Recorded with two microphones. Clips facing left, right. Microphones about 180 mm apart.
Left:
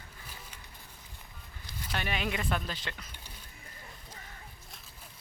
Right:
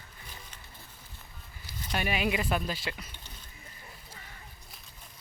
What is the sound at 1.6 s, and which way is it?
Speech, 10° right (ahead or behind).